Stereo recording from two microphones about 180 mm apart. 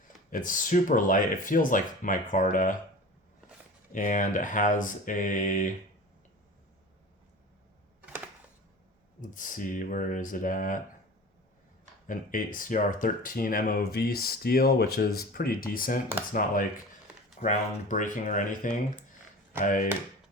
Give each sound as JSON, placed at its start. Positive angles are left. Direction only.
{"t": 0.3, "sound": "speech", "side_deg": 50}
{"t": 3.9, "sound": "speech", "side_deg": 45}
{"t": 9.3, "sound": "speech", "side_deg": 50}
{"t": 12.0, "sound": "speech", "side_deg": 50}